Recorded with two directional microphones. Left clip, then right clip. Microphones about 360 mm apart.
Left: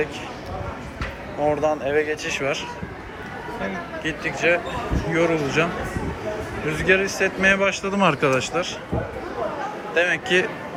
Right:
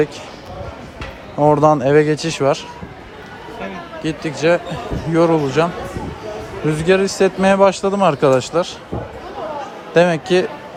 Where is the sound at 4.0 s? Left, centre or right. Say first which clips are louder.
Right 4 dB; centre.